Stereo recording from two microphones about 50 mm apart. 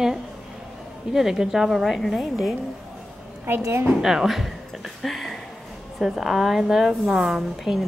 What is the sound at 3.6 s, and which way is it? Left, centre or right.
Speech, right.